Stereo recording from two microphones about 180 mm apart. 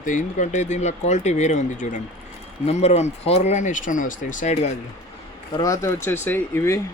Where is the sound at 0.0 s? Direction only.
45° left (ahead or behind).